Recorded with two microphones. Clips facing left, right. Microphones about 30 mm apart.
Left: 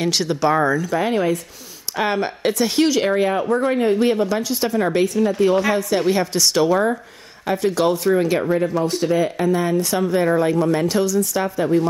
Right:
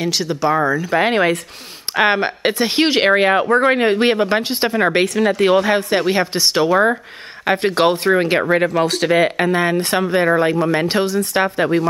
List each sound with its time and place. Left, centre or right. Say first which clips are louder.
0.0 s speech: even; centre
0.9 s speech: right 4 dB; right
2.0 s a woman's voice: right 5 dB; right
2.9 s speech: right 4 dB; right
5.0 s a woman's voice: right 2 dB; right
7.4 s speech: right 3 dB; right
8.5 s speech: right 3 dB; right